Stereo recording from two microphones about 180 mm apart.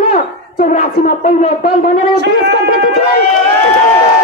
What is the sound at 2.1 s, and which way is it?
Speech, 70° right (ahead or behind).